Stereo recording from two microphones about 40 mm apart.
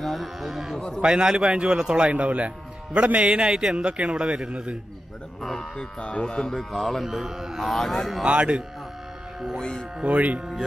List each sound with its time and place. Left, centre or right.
0.0 s speech: centre
0.7 s speech: centre
1.0 s a man's voice: centre
5.4 s speech: centre
5.9 s speech: left
6.5 s speech: centre
8.3 s a man's voice: right
9.6 s speech: centre
10.0 s speech: right